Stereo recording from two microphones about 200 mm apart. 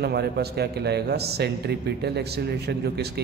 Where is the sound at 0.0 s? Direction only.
55° right (ahead or behind).